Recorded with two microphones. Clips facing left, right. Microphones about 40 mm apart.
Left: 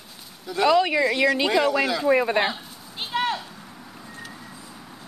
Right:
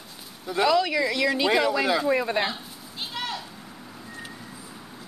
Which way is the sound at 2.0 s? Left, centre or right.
Centre.